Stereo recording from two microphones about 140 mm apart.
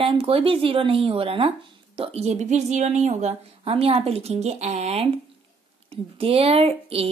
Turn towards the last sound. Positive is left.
turn(degrees=-45)  # may be behind; listen again after turning